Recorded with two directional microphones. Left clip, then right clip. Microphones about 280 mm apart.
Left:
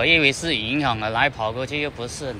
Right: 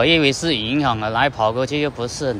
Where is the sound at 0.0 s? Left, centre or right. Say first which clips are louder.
Right 2 dB; centre.